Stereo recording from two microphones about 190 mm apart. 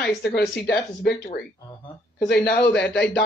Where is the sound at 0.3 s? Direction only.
60° left (ahead or behind).